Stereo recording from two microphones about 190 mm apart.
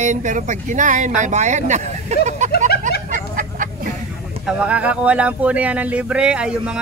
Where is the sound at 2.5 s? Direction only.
60° left (ahead or behind).